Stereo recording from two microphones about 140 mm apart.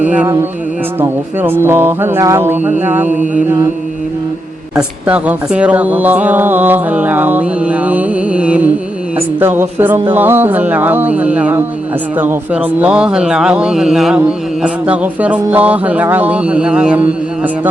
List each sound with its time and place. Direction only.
0.0 s speech: 10° right (ahead or behind)
4.7 s speech: 10° right (ahead or behind)